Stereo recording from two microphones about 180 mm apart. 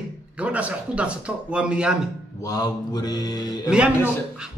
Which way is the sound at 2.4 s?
20° left (ahead or behind).